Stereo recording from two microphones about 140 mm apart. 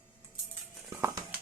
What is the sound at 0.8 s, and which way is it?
Music, 25° right (ahead or behind).